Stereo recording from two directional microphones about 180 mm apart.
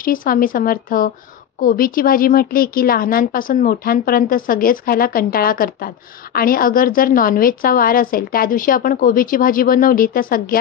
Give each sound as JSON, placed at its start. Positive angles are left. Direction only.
{"t": 0.0, "sound": "a woman's voice", "side_deg": 50}